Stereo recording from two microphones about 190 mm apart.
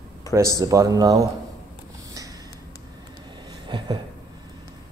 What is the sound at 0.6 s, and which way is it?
Speech, 15° right (ahead or behind).